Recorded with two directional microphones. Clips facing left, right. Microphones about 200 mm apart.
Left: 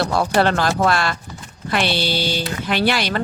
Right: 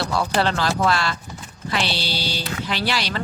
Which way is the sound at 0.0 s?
50° left (ahead or behind).